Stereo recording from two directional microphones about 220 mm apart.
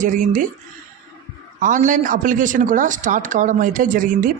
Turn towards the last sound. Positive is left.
turn(degrees=-35)  # may be behind; listen again after turning